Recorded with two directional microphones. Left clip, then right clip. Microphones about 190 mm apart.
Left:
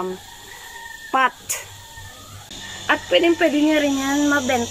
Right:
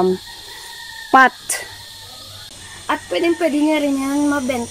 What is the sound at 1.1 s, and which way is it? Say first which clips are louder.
Speech: right 7 dB; 40° right (ahead or behind).